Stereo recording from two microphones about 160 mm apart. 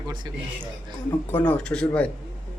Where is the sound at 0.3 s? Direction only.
25° right (ahead or behind).